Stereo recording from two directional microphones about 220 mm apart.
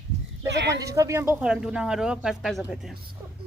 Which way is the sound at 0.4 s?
50° right (ahead or behind).